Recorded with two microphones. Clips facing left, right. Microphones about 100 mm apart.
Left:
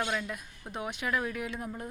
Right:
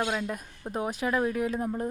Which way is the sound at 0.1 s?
35° right (ahead or behind).